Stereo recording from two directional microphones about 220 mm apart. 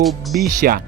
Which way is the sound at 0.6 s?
40° right (ahead or behind).